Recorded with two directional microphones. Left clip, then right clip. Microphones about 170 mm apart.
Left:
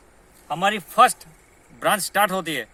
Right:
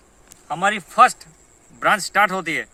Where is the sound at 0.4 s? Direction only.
10° left (ahead or behind).